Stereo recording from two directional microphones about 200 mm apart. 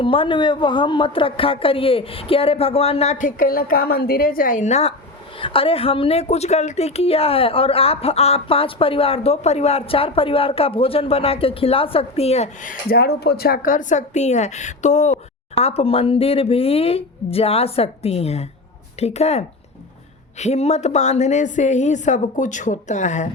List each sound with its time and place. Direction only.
0.0 s a woman's voice: 25° left (ahead or behind)
12.9 s a woman's voice: 55° left (ahead or behind); by 23.3 s 35° left (ahead or behind)